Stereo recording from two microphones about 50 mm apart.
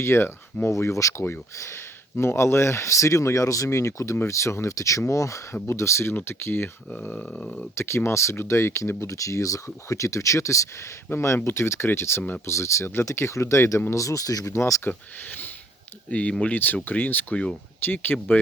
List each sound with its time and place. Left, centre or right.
0.0 s speech: left
0.7 s speech: left
1.5 s speech: left
5.6 s speech: left
6.2 s speech: left
6.9 s speech: left
7.3 s speech: left
7.8 s speech: left
11.1 s speech: left
12.5 s speech: left
13.9 s speech: left
14.8 s speech: left
17.3 s speech: centre
17.8 s speech: left